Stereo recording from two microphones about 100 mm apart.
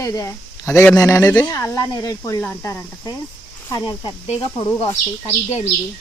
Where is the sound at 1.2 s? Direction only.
15° left (ahead or behind).